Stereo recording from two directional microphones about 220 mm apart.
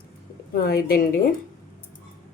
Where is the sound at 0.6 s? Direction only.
45° left (ahead or behind).